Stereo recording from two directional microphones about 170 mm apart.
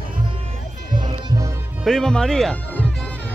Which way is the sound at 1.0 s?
25° right (ahead or behind).